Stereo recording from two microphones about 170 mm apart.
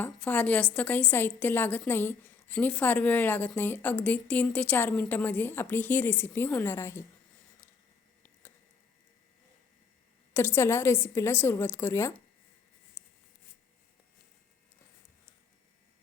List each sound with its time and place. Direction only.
0.0 s a woman's voice: 10° left (ahead or behind)
10.3 s a woman's voice: 15° left (ahead or behind)
13.0 s a sound: 20° left (ahead or behind)